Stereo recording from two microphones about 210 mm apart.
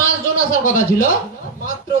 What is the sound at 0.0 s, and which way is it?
Speech, 40° left (ahead or behind).